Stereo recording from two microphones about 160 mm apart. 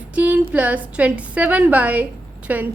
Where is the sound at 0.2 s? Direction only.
10° right (ahead or behind).